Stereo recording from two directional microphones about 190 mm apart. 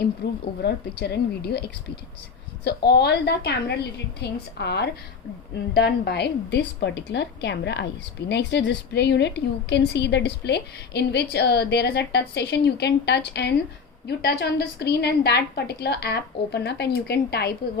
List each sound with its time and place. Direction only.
0.2 s a woman's voice: 60° left (ahead or behind)